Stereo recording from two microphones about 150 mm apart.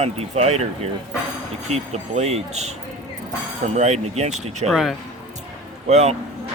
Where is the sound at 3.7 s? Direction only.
45° right (ahead or behind).